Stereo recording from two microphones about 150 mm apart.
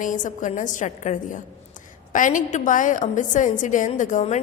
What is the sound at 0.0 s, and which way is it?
A woman's voice, 60° left (ahead or behind).